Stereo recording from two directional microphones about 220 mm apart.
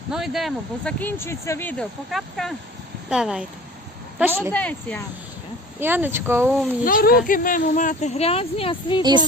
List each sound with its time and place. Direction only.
0.1 s speech: centre (ahead or behind)
4.5 s speech: 5° left (ahead or behind)
5.8 s speech: 10° right (ahead or behind)
6.8 s a woman's voice: 40° left (ahead or behind); by 9.0 s 20° left (ahead or behind)